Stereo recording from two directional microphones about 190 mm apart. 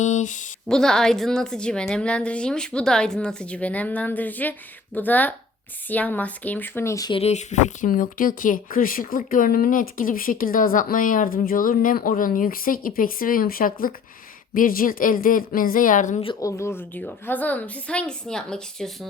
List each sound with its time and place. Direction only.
0.0 s speech: 40° left (ahead or behind)
0.7 s a woman's voice: 5° left (ahead or behind); by 7.2 s 20° left (ahead or behind)
7.2 s speech: 35° left (ahead or behind)
16.2 s a woman's voice: 20° left (ahead or behind); by 18.9 s 5° left (ahead or behind)